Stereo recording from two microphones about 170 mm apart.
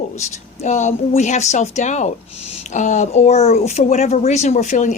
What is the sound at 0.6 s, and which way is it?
Speech, 45° left (ahead or behind).